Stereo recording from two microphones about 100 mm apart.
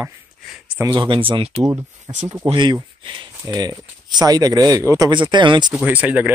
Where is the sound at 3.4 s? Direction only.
40° right (ahead or behind).